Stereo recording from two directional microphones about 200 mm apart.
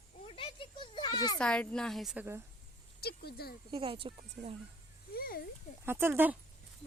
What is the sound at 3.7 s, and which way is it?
Speech, 25° right (ahead or behind).